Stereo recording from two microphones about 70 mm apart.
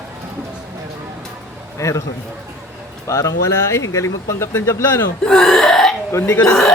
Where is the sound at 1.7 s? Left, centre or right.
Left.